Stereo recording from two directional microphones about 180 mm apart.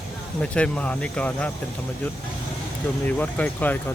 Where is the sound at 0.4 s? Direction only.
5° left (ahead or behind).